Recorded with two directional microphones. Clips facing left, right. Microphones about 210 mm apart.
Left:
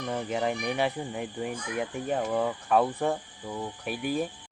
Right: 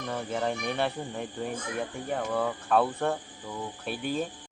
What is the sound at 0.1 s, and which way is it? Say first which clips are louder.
Speech: left 1 dB; 15° left (ahead or behind).